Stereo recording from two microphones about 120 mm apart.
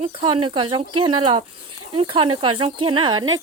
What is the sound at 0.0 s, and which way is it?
Speech, 50° right (ahead or behind).